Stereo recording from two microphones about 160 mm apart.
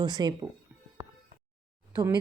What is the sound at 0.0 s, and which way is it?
Speech, 25° right (ahead or behind).